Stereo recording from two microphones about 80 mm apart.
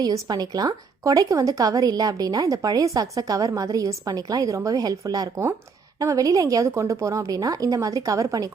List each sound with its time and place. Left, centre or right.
0.0 s a woman's voice: right